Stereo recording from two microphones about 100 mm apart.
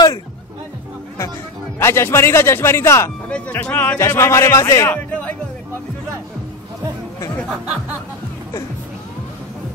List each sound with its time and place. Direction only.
1.8 s speech: 25° left (ahead or behind)
3.3 s speech: 10° left (ahead or behind)
4.0 s speech: 30° left (ahead or behind)